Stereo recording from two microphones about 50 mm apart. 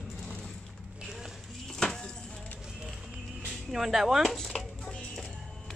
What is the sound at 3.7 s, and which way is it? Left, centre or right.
Speech, centre.